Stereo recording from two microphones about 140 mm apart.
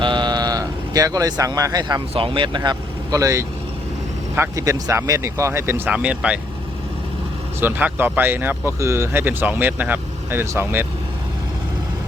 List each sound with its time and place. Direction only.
0.0 s speech: 35° right (ahead or behind); by 6.4 s 10° right (ahead or behind)
7.6 s speech: 10° right (ahead or behind)